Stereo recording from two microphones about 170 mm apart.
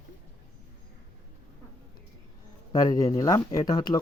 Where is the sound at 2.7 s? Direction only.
20° left (ahead or behind).